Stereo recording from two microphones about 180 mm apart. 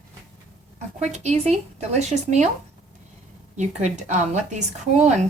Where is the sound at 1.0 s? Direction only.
40° right (ahead or behind).